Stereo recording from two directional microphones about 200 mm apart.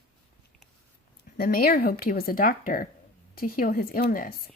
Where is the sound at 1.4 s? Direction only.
50° left (ahead or behind).